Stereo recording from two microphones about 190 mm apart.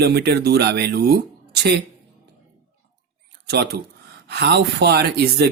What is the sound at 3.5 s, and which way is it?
Speech, 55° right (ahead or behind).